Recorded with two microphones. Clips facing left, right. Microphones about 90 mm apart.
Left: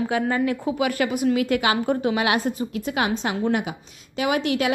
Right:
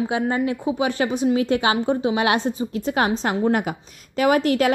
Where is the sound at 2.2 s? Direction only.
30° right (ahead or behind).